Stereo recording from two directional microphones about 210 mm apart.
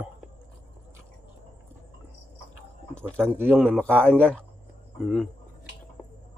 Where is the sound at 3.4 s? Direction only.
10° right (ahead or behind).